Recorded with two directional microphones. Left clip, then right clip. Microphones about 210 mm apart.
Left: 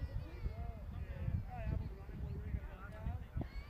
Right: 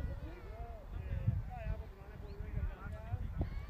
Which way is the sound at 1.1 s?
50° left (ahead or behind).